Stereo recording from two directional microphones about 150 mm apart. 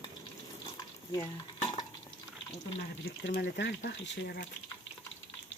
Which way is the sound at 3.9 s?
90° left.